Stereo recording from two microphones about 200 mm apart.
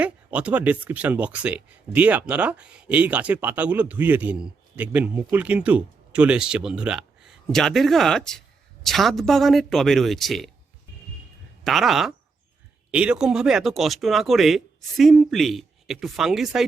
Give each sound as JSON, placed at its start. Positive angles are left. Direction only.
{"t": 0.0, "sound": "speech", "side_deg": -5}
{"t": 11.6, "sound": "speech", "side_deg": 0}